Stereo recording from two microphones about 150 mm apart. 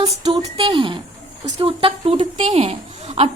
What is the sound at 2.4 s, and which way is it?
Speech, 45° right (ahead or behind).